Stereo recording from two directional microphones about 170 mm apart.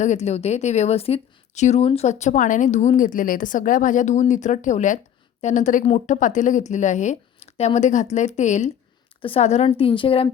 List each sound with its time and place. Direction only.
0.0 s a woman's voice: 40° left (ahead or behind)